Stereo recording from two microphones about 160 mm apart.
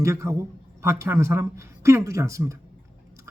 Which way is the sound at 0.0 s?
20° right (ahead or behind).